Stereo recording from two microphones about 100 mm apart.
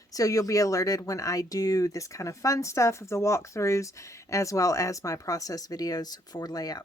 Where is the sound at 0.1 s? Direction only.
35° left (ahead or behind).